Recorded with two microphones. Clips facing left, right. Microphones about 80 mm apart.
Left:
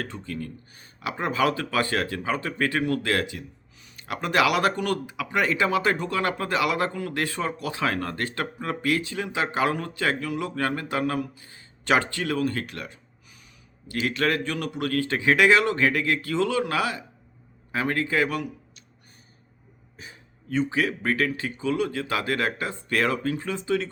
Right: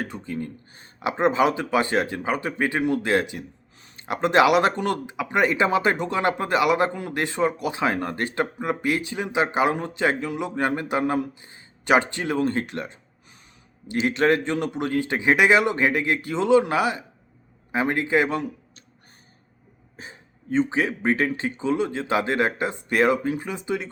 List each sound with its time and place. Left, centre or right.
0.0 s speech: centre
20.0 s speech: right